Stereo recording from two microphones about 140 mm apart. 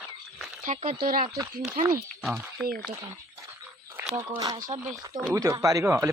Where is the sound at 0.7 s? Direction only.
65° right (ahead or behind).